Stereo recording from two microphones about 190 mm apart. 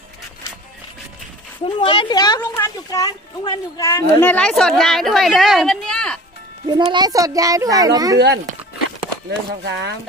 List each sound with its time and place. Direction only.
1.6 s speech: 25° left (ahead or behind); by 6.1 s 5° left (ahead or behind)
6.7 s a child's voice: 25° right (ahead or behind)
9.6 s speech: 65° right (ahead or behind)